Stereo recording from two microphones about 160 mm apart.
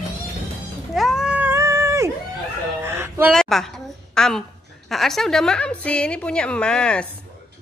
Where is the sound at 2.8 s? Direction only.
15° right (ahead or behind).